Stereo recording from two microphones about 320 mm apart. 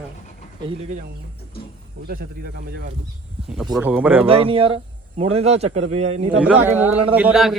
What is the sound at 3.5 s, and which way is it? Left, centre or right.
Speech, centre.